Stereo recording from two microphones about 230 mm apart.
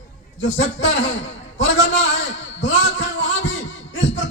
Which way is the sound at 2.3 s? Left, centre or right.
Left.